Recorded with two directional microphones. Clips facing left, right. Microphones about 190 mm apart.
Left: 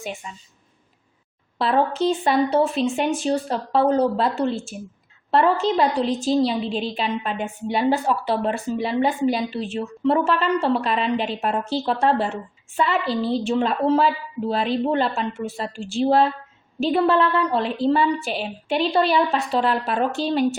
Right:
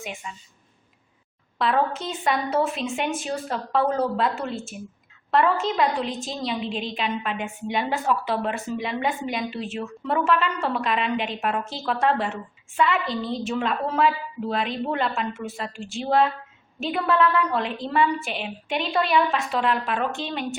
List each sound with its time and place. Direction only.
0.2 s speech: 35° left (ahead or behind)
1.5 s a woman's voice: 35° left (ahead or behind)
6.1 s a woman's voice: centre (ahead or behind)
6.3 s speech: 35° left (ahead or behind)